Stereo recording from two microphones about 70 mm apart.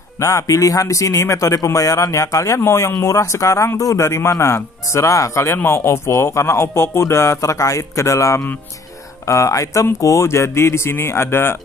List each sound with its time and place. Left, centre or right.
0.2 s a man's voice: left